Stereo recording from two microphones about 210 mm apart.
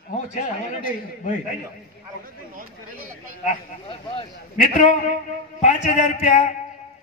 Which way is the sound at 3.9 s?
25° left (ahead or behind).